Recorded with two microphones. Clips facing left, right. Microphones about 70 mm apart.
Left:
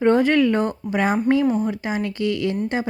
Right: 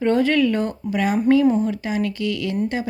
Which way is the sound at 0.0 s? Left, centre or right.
Left.